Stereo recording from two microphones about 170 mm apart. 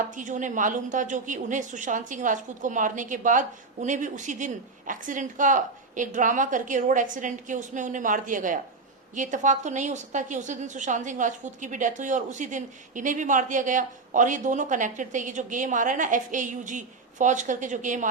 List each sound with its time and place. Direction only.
0.2 s a woman's voice: 50° right (ahead or behind)